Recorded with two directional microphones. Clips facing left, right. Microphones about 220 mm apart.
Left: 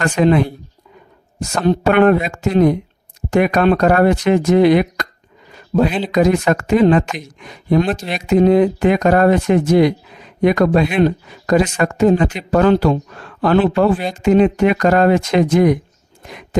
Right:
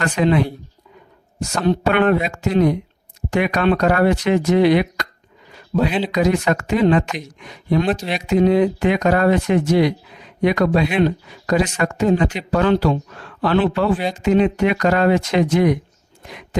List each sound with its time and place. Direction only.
0.0 s speech: 50° left (ahead or behind)
6.1 s speech: 50° left (ahead or behind)
16.2 s a sound: 45° left (ahead or behind)